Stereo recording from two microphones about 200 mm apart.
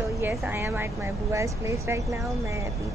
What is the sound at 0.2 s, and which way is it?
A woman's voice, 10° right (ahead or behind).